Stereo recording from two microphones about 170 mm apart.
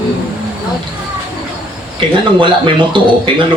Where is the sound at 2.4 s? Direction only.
30° right (ahead or behind).